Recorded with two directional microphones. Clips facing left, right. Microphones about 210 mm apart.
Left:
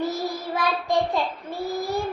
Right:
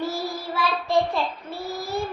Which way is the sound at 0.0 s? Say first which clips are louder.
Left 1 dB; 20° left (ahead or behind).